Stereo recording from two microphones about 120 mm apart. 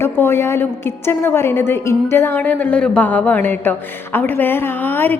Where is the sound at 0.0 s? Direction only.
20° left (ahead or behind).